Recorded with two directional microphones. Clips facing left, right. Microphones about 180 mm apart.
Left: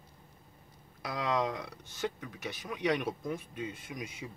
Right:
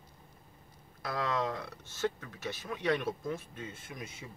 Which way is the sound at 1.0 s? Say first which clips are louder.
Left 1 dB; 15° left (ahead or behind).